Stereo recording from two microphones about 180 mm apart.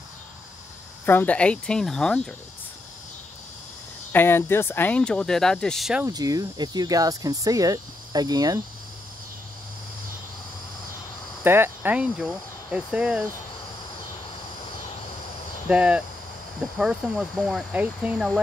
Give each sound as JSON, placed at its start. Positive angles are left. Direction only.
{"t": 1.0, "sound": "speech", "side_deg": 10}
{"t": 4.1, "sound": "speech", "side_deg": 10}
{"t": 6.0, "sound": "speech", "side_deg": -20}
{"t": 11.4, "sound": "speech", "side_deg": -10}
{"t": 15.7, "sound": "speech", "side_deg": -5}